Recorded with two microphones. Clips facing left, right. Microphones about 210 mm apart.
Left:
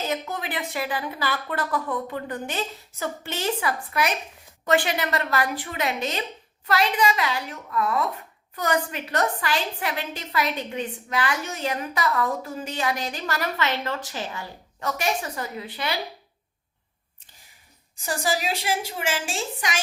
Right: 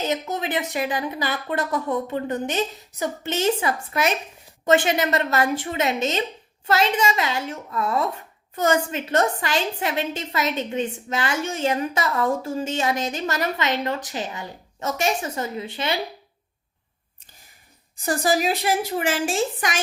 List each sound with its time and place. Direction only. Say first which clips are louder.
0.0 s speech: right 3 dB; 20° right (ahead or behind)
18.0 s a woman's voice: right 5 dB; 50° right (ahead or behind)